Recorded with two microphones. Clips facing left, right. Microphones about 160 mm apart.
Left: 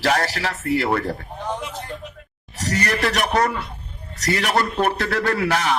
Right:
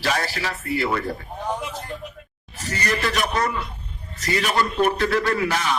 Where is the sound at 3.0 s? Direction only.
65° left (ahead or behind).